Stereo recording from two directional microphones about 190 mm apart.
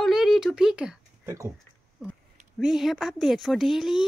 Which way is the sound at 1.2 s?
15° right (ahead or behind).